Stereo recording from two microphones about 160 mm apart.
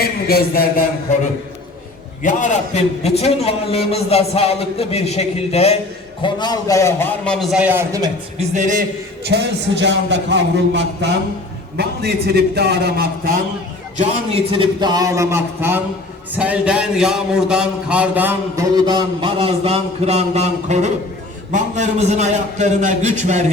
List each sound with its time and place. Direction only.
0.0 s a sound: 70° left (ahead or behind)
2.2 s a man's voice: 50° left (ahead or behind)
6.2 s a man's voice: 25° left (ahead or behind)
7.3 s a man's voice: centre (ahead or behind)
8.4 s a man's voice: 50° right (ahead or behind)
9.2 s a man's voice: 90° right; by 13.4 s 70° right (ahead or behind)
14.0 s a man's voice: 40° right (ahead or behind); by 18.6 s 10° right (ahead or behind)
18.9 s a man's voice: 30° right (ahead or behind); by 23.4 s 45° right (ahead or behind)